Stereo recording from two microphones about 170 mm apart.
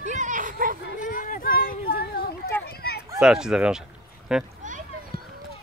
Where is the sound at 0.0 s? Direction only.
45° right (ahead or behind).